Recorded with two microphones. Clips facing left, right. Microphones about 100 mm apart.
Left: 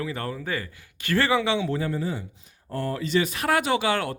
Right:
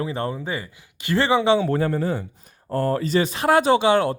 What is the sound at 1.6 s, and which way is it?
Speech, 50° right (ahead or behind).